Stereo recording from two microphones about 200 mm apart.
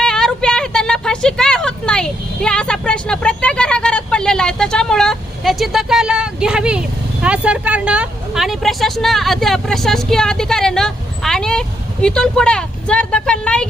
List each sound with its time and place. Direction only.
0.0 s vehicle: 5° left (ahead or behind)
12.0 s a woman's voice: 5° left (ahead or behind)